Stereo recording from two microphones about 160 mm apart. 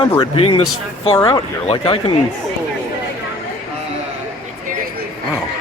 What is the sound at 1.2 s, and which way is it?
Speech, 20° left (ahead or behind).